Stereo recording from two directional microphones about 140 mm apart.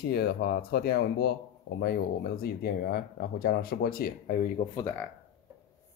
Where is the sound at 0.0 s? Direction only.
90° left.